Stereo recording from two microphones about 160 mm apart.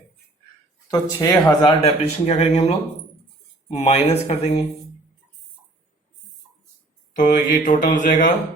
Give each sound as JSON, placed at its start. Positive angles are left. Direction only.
{"t": 0.9, "sound": "speech", "side_deg": 25}
{"t": 1.8, "sound": "speech", "side_deg": 40}
{"t": 3.8, "sound": "speech", "side_deg": 40}
{"t": 7.3, "sound": "mantra", "side_deg": 60}